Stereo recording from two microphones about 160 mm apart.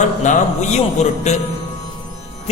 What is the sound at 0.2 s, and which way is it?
A man's voice, 45° left (ahead or behind).